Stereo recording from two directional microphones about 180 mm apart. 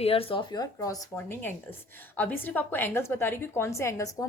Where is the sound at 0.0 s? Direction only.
30° left (ahead or behind).